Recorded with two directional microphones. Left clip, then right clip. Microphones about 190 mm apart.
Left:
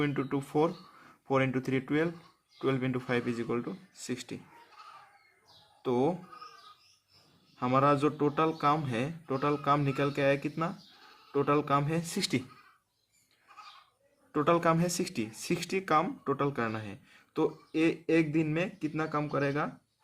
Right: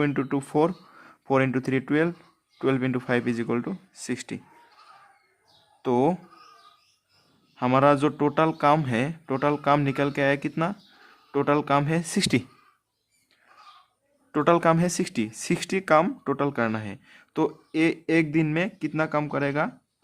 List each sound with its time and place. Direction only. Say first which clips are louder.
0.0 s speech: right 6 dB; 45° right (ahead or behind)
5.8 s speech: right 6 dB; 50° right (ahead or behind)
7.5 s speech: right 6 dB; 50° right (ahead or behind)
14.3 s speech: right 6 dB; 50° right (ahead or behind)